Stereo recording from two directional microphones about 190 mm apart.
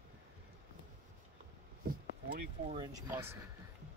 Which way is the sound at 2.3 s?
50° right (ahead or behind).